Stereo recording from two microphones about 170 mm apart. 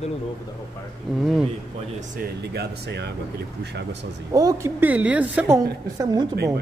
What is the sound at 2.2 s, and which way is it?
Speech, 75° right (ahead or behind).